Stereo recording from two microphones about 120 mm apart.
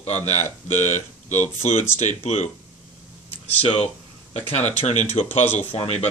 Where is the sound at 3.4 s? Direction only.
60° left (ahead or behind).